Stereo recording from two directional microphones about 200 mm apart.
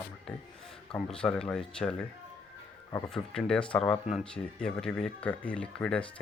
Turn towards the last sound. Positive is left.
turn(degrees=5)  # may be behind; listen again after turning